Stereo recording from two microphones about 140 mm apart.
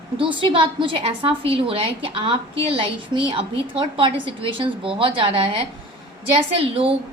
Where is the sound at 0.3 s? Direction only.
35° right (ahead or behind).